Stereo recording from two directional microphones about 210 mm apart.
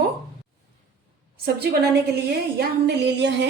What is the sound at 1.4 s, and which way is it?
A woman's voice, 50° right (ahead or behind).